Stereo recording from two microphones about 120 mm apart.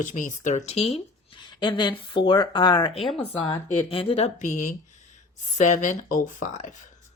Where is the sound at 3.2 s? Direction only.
50° left (ahead or behind).